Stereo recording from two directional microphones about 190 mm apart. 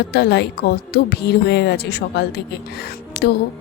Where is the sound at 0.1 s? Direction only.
60° left (ahead or behind).